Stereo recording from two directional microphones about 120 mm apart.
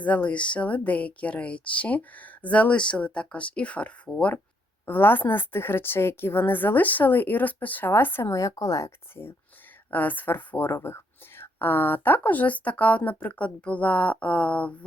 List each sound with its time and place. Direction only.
0.0 s a woman's voice: 10° left (ahead or behind)